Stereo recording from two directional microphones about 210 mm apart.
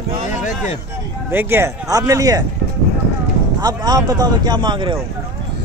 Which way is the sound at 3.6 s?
20° right (ahead or behind).